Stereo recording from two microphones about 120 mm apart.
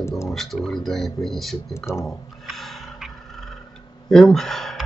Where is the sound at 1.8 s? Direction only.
25° left (ahead or behind).